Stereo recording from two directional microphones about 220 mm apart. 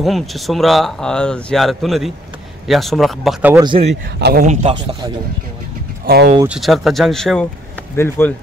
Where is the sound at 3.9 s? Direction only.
50° right (ahead or behind).